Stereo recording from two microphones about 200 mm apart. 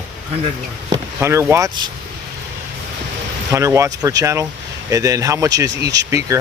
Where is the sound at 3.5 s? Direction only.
15° right (ahead or behind).